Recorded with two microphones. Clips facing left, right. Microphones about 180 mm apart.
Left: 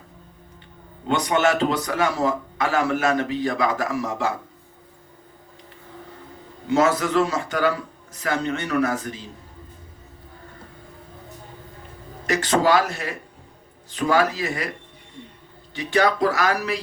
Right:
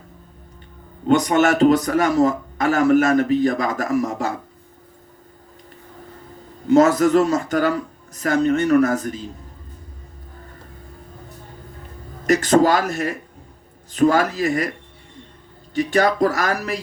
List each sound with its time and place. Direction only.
1.0 s a man's voice: 45° right (ahead or behind)
6.7 s a man's voice: 45° right (ahead or behind)
12.2 s a man's voice: 45° right (ahead or behind)
15.7 s a man's voice: 45° right (ahead or behind)